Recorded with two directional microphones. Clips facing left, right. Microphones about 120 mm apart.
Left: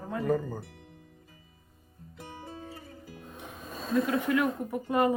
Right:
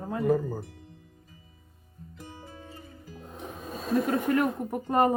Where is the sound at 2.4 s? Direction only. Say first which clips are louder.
Left 3 dB; 30° left (ahead or behind).